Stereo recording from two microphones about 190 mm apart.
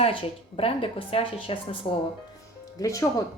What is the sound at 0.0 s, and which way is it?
Speech, 30° left (ahead or behind).